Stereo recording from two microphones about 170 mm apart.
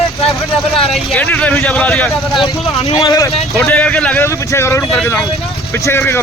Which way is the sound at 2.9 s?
20° left (ahead or behind).